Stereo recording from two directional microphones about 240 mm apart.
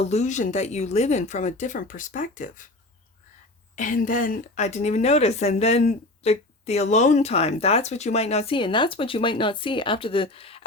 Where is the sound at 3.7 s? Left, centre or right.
Left.